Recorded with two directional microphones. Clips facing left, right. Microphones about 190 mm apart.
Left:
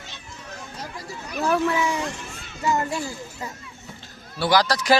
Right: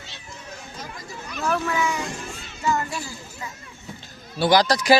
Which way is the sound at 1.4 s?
30° left (ahead or behind).